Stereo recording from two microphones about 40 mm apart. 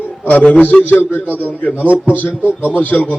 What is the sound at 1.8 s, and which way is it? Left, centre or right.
Speech, right.